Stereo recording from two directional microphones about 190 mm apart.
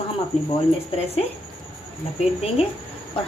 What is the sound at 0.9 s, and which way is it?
Speech, 30° left (ahead or behind).